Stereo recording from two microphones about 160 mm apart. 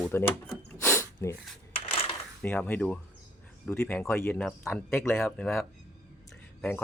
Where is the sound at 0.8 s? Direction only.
15° left (ahead or behind).